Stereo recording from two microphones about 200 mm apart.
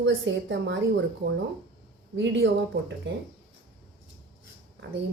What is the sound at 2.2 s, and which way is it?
Speech, 65° right (ahead or behind).